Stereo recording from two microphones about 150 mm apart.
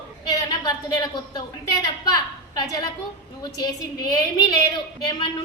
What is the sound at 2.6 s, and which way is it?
Speech, 25° left (ahead or behind).